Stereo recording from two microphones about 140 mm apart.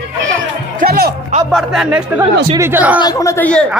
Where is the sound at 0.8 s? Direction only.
90° right.